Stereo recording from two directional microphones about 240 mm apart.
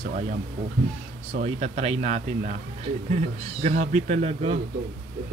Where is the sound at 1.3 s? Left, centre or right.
Right.